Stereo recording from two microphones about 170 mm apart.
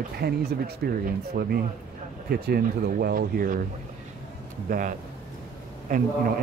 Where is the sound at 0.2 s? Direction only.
60° right (ahead or behind).